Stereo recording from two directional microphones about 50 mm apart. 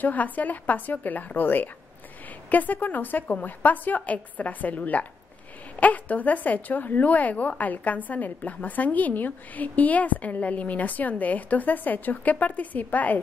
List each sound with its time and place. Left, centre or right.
0.0 s a woman's voice: left